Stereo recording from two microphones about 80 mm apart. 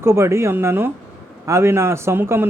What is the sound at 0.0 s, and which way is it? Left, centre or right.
Speech, right.